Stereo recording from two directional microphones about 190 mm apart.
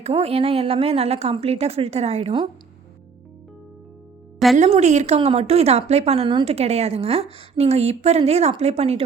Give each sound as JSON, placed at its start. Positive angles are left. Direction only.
{"t": 0.0, "sound": "a woman's voice", "side_deg": -30}
{"t": 4.5, "sound": "a woman's voice", "side_deg": -35}